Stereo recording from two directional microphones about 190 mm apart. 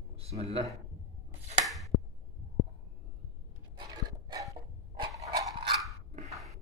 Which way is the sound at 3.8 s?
20° right (ahead or behind).